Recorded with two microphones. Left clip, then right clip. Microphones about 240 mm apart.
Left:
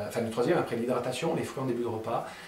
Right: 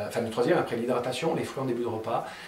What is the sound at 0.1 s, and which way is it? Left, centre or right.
Speech, centre.